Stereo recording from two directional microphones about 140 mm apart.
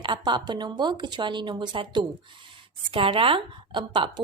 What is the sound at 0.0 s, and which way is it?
Speech, 35° right (ahead or behind).